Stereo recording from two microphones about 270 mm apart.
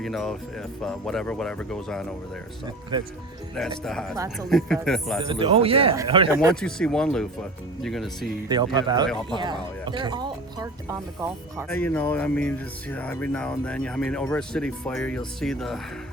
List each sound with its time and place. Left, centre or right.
0.0 s speech: centre
3.8 s speech: centre
5.3 s speech: centre
6.5 s speech: centre
8.4 s speech: centre
11.7 s speech: centre